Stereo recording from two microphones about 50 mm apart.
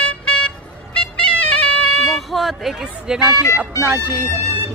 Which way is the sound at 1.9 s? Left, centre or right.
Centre.